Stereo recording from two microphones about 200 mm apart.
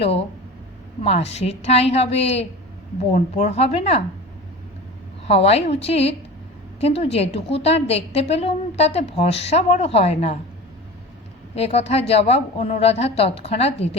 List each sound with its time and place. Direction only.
1.3 s a woman's voice: 35° left (ahead or behind)
5.3 s a woman's voice: 30° left (ahead or behind)
11.5 s a woman's voice: 30° left (ahead or behind)